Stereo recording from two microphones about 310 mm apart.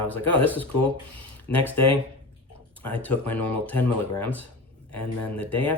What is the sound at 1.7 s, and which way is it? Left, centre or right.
Speech, left.